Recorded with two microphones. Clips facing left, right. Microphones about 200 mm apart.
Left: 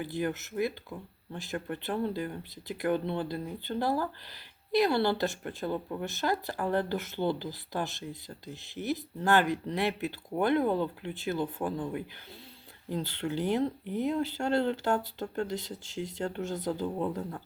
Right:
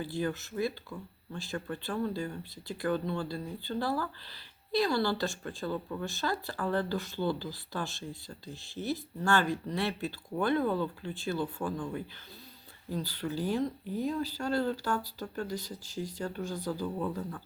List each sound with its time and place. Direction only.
0.0 s speech: 15° left (ahead or behind)